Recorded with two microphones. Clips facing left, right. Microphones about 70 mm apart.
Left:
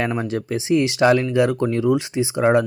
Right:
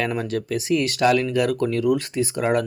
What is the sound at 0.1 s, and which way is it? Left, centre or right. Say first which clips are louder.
Speech: left 1 dB; centre.